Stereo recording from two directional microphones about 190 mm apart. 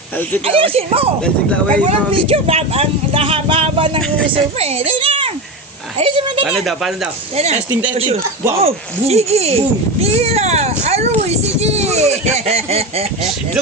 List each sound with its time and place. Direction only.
0.4 s speech: 30° right (ahead or behind)
1.2 s speech: 5° left (ahead or behind)
1.9 s speech: 30° right (ahead or behind)
6.4 s speech: 5° right (ahead or behind)
7.3 s speech: 35° right (ahead or behind)